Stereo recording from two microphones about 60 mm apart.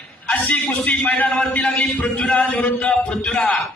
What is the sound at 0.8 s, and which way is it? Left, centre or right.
A man's voice, left.